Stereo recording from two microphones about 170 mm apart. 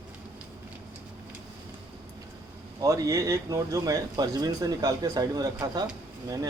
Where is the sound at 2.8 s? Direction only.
20° right (ahead or behind).